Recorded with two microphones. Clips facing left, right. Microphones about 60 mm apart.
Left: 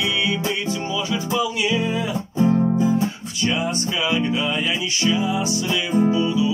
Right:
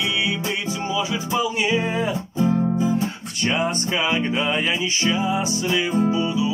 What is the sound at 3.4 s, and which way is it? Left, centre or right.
Music, right.